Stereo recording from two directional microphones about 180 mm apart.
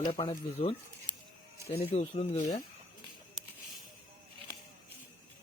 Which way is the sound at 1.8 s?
35° left (ahead or behind).